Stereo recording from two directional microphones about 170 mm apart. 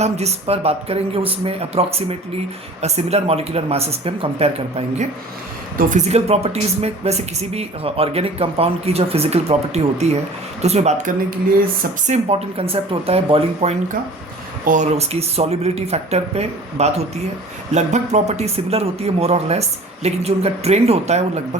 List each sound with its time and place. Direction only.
0.0 s speech: 40° right (ahead or behind)
5.7 s speech: 45° right (ahead or behind)
14.6 s speech: 50° right (ahead or behind)